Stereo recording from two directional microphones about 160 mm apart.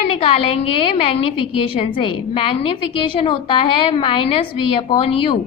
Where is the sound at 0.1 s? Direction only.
35° left (ahead or behind).